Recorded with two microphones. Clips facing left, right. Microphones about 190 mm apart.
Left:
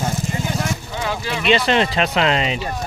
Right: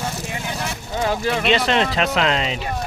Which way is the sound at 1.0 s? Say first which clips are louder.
Right 4 dB; 45° right (ahead or behind).